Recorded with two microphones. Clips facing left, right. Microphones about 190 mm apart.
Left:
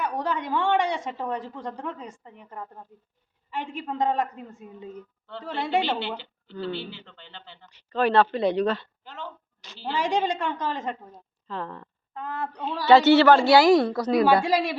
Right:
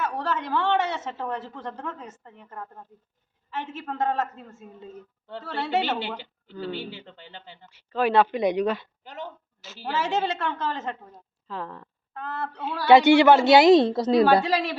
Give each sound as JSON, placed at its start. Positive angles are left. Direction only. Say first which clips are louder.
{"t": 0.0, "sound": "a woman's voice", "louder": "even", "side_deg": 15}
{"t": 6.0, "sound": "speech", "louder": "left 1 dB", "side_deg": -15}
{"t": 9.8, "sound": "a woman's voice", "louder": "left 1 dB", "side_deg": 15}
{"t": 11.1, "sound": "speech", "louder": "left 1 dB", "side_deg": -5}
{"t": 12.1, "sound": "a woman's voice", "louder": "even", "side_deg": 15}
{"t": 12.5, "sound": "speech", "louder": "right 1 dB", "side_deg": -10}
{"t": 14.4, "sound": "a woman's voice", "louder": "left 2 dB", "side_deg": 10}